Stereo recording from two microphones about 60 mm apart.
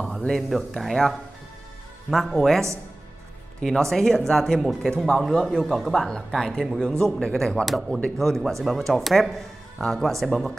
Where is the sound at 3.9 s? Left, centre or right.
Centre.